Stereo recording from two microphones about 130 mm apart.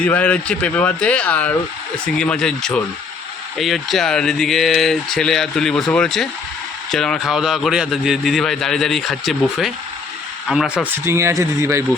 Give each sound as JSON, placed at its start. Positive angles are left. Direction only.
{"t": 0.0, "sound": "a man's voice", "side_deg": 10}
{"t": 10.9, "sound": "speech", "side_deg": -20}